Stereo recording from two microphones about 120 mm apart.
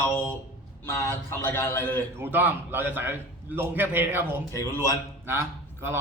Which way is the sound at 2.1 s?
15° right (ahead or behind).